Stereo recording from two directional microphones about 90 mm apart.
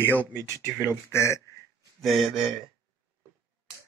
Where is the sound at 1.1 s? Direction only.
30° left (ahead or behind).